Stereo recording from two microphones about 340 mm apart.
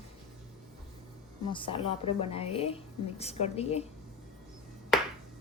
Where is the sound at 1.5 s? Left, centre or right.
Centre.